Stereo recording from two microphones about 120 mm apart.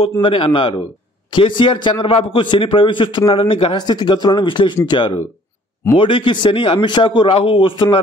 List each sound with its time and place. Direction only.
0.2 s a man's voice: 45° left (ahead or behind)
3.7 s a man's voice: 35° left (ahead or behind)